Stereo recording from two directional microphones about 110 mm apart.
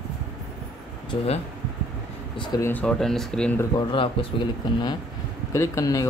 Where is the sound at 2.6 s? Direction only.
15° left (ahead or behind).